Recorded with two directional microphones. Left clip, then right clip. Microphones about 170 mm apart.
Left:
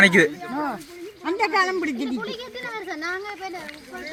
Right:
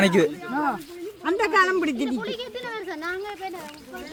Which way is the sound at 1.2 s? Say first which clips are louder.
Right 1 dB; 30° left (ahead or behind).